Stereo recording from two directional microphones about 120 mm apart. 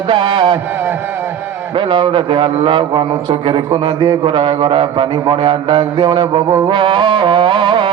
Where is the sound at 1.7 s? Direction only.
45° right (ahead or behind).